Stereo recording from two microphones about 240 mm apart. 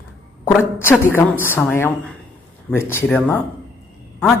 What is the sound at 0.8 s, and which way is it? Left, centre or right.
Speech, centre.